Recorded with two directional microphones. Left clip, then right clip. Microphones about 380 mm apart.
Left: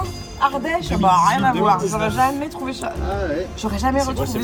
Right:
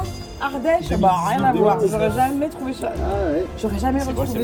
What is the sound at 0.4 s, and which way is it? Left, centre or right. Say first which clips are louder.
Speech: even; centre.